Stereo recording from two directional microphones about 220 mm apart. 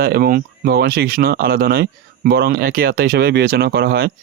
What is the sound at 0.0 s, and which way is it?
Speech, 45° right (ahead or behind).